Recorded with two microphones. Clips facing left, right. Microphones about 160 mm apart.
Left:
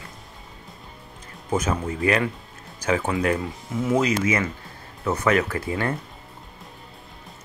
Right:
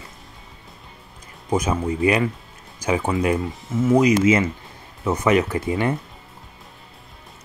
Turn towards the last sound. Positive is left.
turn(degrees=-20)  # may be behind; listen again after turning